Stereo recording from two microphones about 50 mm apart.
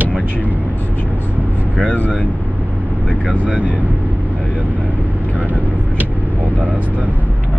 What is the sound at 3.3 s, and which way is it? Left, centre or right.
Speech, right.